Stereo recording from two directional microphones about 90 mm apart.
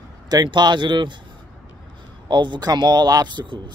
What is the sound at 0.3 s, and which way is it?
Speech, 55° right (ahead or behind).